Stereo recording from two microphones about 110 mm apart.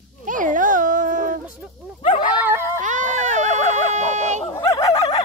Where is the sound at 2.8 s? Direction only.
90° right.